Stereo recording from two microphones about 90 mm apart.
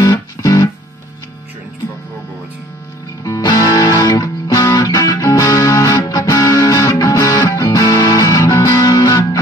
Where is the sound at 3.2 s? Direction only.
40° left (ahead or behind).